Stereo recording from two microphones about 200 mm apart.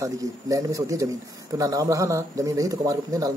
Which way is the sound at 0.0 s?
15° right (ahead or behind).